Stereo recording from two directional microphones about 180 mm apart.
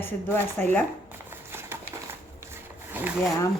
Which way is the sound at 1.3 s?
15° right (ahead or behind).